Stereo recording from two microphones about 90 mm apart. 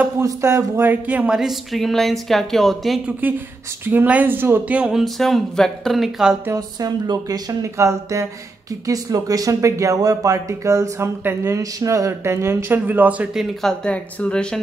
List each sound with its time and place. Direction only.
0.2 s speech: 35° right (ahead or behind); by 3.0 s centre (ahead or behind)
3.1 s speech: 20° right (ahead or behind)
5.0 s speech: centre (ahead or behind)
6.5 s speech: 45° right (ahead or behind); by 13.3 s 20° right (ahead or behind)
13.3 s speech: centre (ahead or behind)